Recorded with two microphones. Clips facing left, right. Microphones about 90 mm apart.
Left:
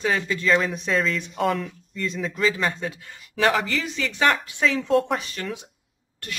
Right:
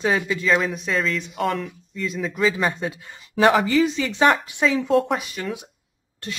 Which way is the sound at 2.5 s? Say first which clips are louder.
Right 2 dB; 15° right (ahead or behind).